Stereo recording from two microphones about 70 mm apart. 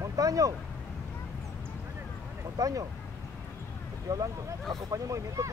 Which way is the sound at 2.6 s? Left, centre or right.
Right.